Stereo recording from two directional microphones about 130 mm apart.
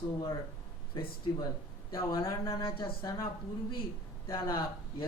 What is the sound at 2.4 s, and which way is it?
Speech, 40° left (ahead or behind).